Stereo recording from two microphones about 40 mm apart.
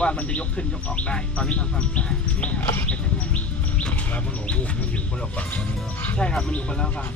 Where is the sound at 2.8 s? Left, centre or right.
Left.